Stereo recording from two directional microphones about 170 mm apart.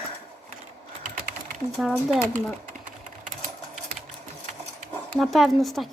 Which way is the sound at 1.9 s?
10° right (ahead or behind).